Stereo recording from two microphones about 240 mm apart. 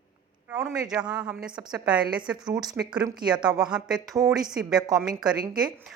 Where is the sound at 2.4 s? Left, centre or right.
Centre.